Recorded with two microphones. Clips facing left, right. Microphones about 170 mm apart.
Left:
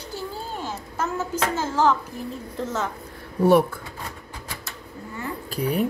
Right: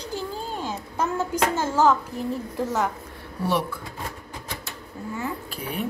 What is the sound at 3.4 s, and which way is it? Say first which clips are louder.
Speech: left 8 dB; 50° left (ahead or behind).